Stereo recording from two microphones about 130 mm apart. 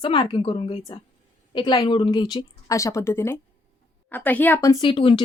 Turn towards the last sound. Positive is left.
turn(degrees=40)  # may be behind; listen again after turning